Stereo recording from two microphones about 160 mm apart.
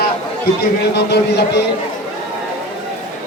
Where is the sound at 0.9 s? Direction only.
90° left.